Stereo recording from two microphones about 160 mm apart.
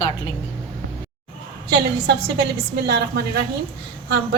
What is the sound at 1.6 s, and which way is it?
A woman's voice, 80° right.